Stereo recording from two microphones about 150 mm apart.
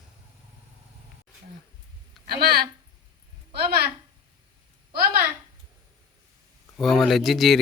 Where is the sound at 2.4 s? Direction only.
90° right.